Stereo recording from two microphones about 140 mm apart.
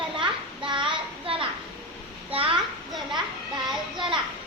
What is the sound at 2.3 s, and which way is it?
A child's voice, 40° right (ahead or behind).